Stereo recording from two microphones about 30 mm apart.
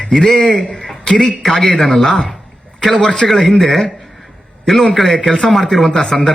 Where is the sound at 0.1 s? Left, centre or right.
Centre.